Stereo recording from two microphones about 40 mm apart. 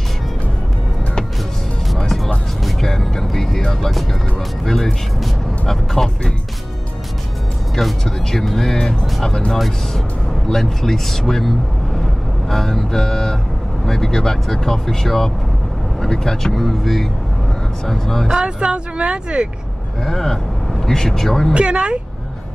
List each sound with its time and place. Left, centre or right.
2.0 s music: centre
4.6 s music: centre
7.7 s speech: centre
8.7 s speech: centre
10.5 s speech: centre
18.4 s speech: right
20.1 s speech: centre
21.5 s speech: right